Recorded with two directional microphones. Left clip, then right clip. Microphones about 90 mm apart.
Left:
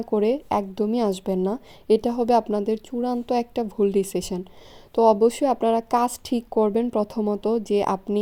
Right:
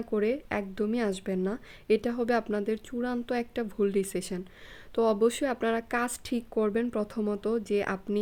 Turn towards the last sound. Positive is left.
turn(degrees=30)  # may be behind; listen again after turning